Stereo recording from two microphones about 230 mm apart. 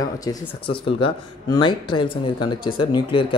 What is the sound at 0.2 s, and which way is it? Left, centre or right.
Speech, centre.